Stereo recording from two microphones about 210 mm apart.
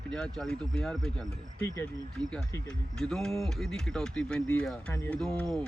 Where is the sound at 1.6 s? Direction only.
15° left (ahead or behind).